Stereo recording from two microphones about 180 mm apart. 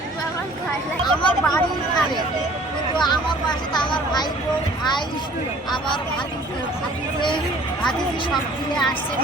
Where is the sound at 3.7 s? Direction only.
25° left (ahead or behind).